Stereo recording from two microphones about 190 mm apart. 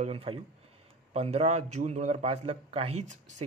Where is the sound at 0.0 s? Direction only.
30° right (ahead or behind).